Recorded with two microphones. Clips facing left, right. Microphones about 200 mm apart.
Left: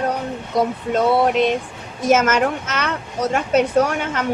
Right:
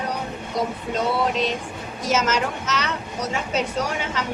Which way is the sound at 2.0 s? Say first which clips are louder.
Left 6 dB; 55° left (ahead or behind).